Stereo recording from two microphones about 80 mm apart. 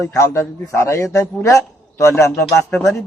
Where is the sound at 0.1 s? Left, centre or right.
Left.